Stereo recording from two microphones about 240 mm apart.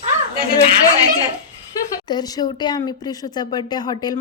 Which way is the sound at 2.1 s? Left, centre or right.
Centre.